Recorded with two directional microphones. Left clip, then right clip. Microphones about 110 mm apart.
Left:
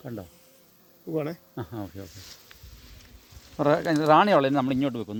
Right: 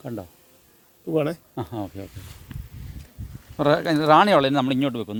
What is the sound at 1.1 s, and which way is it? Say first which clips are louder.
Speech: right 7 dB; 60° right (ahead or behind).